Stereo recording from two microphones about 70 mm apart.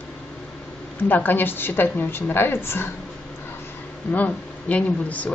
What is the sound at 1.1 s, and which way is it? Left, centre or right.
A woman's voice, left.